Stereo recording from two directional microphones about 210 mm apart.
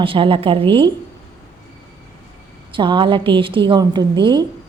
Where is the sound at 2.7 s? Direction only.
20° right (ahead or behind).